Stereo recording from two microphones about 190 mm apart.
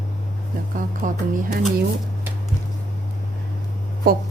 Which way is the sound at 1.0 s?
45° right (ahead or behind).